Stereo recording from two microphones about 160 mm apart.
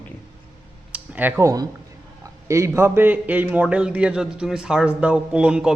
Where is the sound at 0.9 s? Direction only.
10° right (ahead or behind).